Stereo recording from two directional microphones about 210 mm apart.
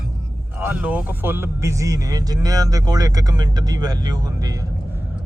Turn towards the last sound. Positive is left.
turn(degrees=-10)  # may be behind; listen again after turning